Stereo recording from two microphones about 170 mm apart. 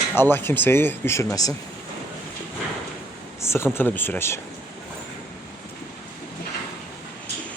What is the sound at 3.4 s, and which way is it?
Speech, 15° left (ahead or behind).